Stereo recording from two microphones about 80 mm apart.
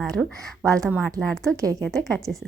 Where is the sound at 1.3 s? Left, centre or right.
Centre.